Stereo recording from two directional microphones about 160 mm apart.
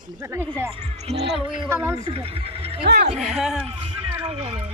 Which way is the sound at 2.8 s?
90° right.